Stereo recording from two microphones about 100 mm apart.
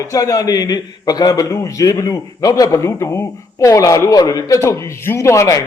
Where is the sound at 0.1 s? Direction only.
35° left (ahead or behind).